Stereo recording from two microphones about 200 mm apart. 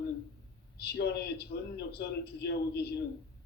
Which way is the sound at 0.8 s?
55° left (ahead or behind).